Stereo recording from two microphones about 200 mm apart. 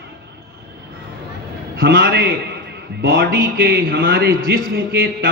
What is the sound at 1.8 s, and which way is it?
Speech, 50° right (ahead or behind).